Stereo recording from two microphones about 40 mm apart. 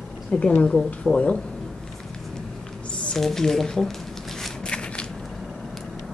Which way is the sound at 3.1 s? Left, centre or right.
Centre.